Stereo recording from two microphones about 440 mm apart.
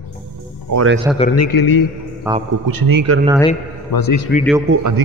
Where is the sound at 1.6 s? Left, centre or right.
Left.